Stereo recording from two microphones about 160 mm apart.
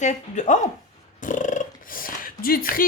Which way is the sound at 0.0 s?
50° left (ahead or behind).